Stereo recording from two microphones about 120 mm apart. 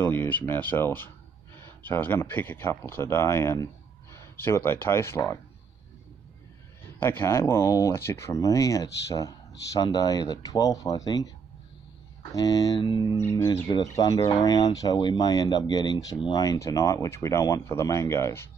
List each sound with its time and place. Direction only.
0.0 s speech: 15° left (ahead or behind)
7.0 s speech: 20° left (ahead or behind)
12.4 s speech: 30° left (ahead or behind)
13.2 s speech: 20° left (ahead or behind)
13.5 s speech: 35° left (ahead or behind)